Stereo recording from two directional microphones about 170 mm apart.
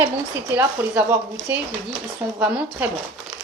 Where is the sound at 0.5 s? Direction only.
10° right (ahead or behind).